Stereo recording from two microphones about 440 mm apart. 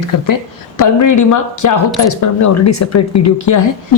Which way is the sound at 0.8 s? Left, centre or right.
Left.